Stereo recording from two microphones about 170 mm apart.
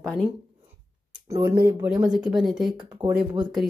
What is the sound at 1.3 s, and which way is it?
Speech, 25° right (ahead or behind).